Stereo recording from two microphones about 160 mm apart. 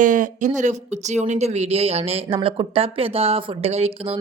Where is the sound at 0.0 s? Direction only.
55° right (ahead or behind).